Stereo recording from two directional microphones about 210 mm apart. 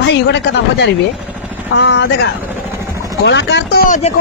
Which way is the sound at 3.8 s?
35° left (ahead or behind).